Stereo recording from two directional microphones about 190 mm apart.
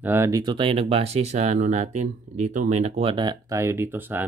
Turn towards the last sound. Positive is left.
turn(degrees=-10)  # may be behind; listen again after turning